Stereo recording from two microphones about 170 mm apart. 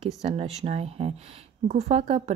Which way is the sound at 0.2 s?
40° right (ahead or behind).